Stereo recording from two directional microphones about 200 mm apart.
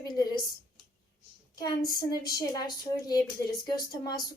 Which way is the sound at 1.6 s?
20° left (ahead or behind).